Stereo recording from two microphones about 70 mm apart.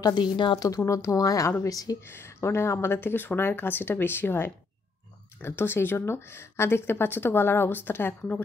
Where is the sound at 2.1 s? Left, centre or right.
Left.